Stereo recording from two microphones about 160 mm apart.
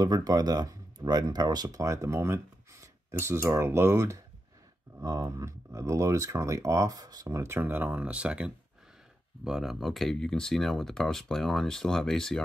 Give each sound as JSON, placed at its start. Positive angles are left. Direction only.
{"t": 0.0, "sound": "speech", "side_deg": -25}